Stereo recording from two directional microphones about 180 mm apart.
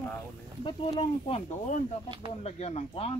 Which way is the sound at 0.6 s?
25° left (ahead or behind).